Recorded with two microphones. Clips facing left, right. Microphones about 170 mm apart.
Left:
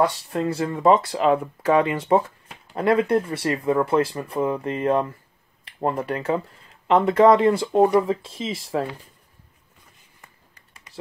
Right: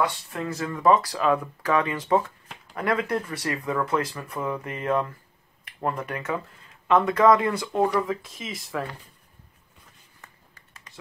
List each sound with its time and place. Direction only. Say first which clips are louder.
0.0 s speech: left 6 dB; 35° left (ahead or behind)